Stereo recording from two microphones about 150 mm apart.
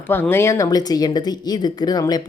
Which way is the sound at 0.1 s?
15° left (ahead or behind).